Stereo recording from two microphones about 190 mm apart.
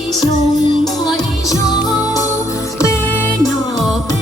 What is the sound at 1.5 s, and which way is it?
Music, 20° left (ahead or behind).